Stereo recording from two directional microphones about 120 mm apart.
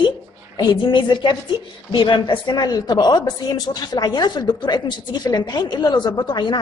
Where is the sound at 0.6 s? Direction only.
40° left (ahead or behind).